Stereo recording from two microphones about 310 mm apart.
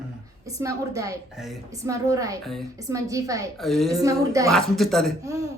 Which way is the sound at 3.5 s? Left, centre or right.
Centre.